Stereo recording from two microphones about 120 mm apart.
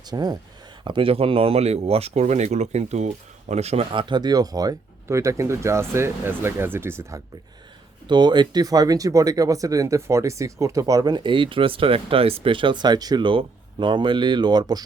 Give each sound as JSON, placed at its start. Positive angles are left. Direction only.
{"t": 0.0, "sound": "speech", "side_deg": -35}
{"t": 0.9, "sound": "speech", "side_deg": -45}
{"t": 3.9, "sound": "speech", "side_deg": -40}
{"t": 8.0, "sound": "speech", "side_deg": -40}